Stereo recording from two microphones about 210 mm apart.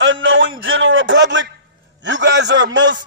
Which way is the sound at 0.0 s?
65° right (ahead or behind).